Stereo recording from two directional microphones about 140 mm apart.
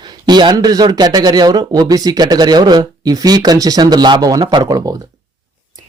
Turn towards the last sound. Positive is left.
turn(degrees=-25)  # may be behind; listen again after turning